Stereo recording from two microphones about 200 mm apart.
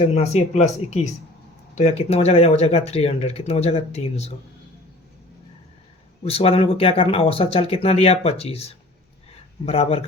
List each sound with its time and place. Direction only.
0.1 s speech: 35° left (ahead or behind)
6.2 s speech: 30° left (ahead or behind)